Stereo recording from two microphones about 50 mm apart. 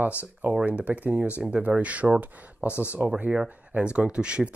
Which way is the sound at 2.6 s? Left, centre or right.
Left.